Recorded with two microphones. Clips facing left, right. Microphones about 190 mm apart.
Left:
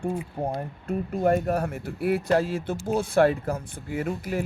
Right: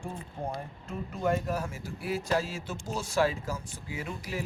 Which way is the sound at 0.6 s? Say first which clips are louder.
Left 8 dB; 55° left (ahead or behind).